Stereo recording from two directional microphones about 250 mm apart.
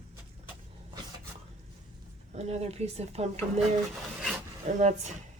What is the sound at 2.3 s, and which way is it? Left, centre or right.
Speech, right.